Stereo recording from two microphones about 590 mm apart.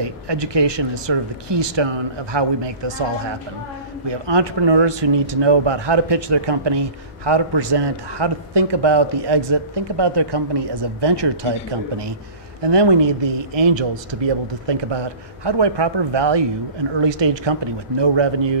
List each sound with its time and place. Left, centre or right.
0.0 s speech: right
4.1 s speech: right
12.6 s speech: right